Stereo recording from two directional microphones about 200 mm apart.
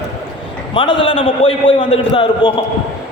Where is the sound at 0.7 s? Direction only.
25° left (ahead or behind).